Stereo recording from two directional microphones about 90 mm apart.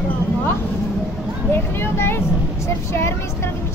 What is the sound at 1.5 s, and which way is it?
Vehicle, 25° left (ahead or behind).